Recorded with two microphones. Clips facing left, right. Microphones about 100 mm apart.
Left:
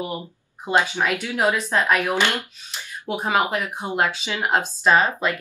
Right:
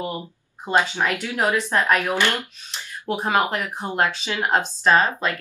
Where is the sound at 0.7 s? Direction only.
15° left (ahead or behind).